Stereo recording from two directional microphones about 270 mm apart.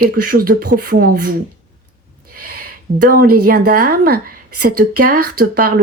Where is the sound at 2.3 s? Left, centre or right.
Right.